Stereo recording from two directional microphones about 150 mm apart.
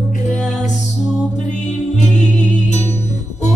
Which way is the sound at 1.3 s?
50° left (ahead or behind).